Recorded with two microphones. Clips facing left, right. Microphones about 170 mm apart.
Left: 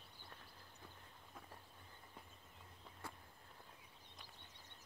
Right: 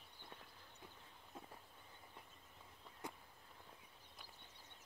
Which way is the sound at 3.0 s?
15° right (ahead or behind).